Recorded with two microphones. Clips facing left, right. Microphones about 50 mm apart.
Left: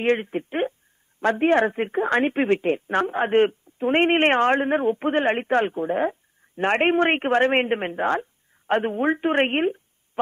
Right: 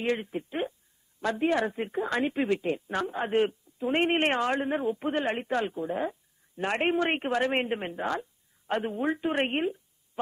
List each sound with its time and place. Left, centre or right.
0.0 s speech: left